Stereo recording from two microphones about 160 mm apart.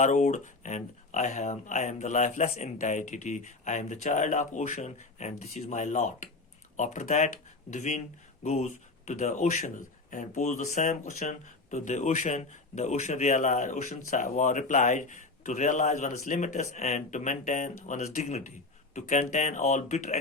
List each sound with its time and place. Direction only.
0.0 s speech: 45° left (ahead or behind)